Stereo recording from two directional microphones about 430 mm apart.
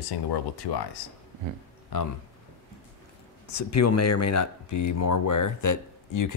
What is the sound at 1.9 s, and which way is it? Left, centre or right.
Speech, left.